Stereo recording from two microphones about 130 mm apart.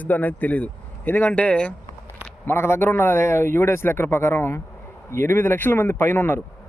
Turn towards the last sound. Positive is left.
turn(degrees=15)  # may be behind; listen again after turning